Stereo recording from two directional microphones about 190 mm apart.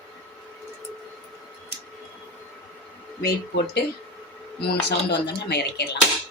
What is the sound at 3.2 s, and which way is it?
Speech, 60° left (ahead or behind).